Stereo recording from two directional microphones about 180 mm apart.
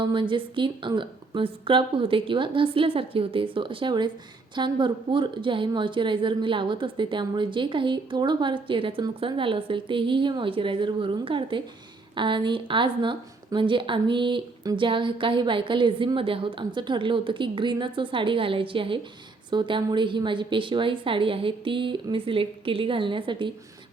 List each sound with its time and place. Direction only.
0.0 s speech: 25° right (ahead or behind)